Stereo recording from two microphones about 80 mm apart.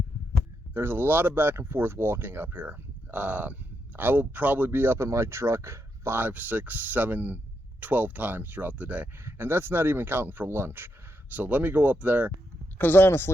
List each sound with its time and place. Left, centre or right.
0.7 s speech: right
9.2 s speech: right
12.8 s speech: left